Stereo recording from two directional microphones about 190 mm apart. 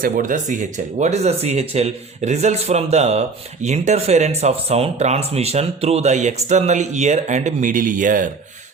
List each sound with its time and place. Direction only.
0.0 s a man's voice: 45° right (ahead or behind)